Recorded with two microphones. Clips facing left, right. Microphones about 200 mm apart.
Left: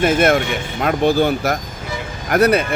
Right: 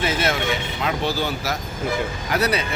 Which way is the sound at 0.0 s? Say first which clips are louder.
Left 8 dB; 50° left (ahead or behind).